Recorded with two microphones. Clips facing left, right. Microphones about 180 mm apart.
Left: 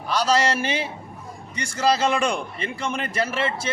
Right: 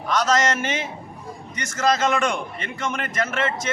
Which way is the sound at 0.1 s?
35° left (ahead or behind).